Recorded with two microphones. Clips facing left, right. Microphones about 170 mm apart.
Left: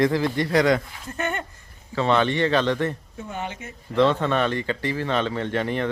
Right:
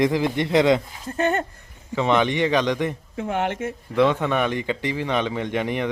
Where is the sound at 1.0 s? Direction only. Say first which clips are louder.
Right 6 dB; 35° right (ahead or behind).